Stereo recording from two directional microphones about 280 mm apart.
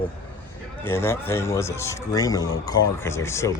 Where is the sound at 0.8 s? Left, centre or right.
Centre.